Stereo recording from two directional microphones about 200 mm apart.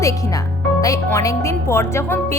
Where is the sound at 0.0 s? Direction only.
15° left (ahead or behind).